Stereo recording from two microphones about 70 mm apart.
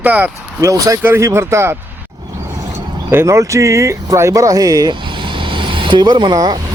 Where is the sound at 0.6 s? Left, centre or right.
Right.